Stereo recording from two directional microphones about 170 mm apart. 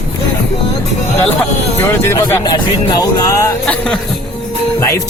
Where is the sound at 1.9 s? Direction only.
15° left (ahead or behind).